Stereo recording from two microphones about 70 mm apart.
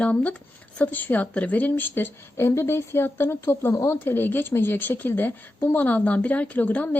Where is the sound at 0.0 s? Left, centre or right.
Centre.